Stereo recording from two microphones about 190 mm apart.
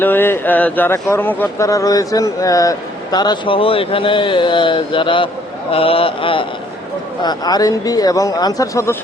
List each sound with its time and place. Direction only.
0.0 s speech: 10° left (ahead or behind)